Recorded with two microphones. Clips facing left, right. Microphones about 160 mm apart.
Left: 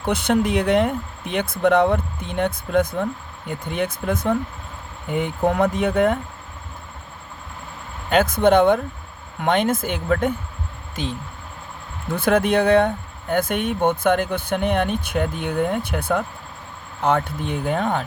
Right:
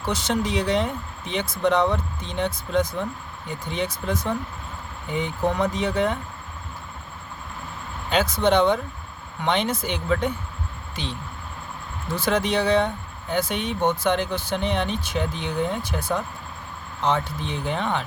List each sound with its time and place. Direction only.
0.0 s speech: 55° left (ahead or behind)
8.1 s speech: 50° left (ahead or behind)